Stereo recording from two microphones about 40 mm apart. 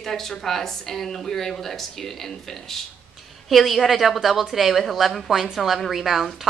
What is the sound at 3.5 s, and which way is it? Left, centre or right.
A woman's voice, centre.